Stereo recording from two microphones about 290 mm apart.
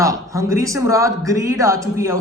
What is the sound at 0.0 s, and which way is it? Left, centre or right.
A man's voice, centre.